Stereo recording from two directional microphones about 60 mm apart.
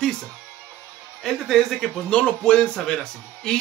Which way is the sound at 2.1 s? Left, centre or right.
Centre.